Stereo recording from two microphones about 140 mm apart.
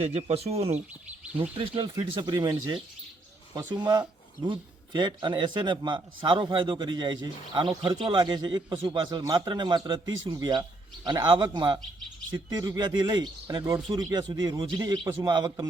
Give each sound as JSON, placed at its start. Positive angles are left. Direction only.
{"t": 0.0, "sound": "a man's voice", "side_deg": -50}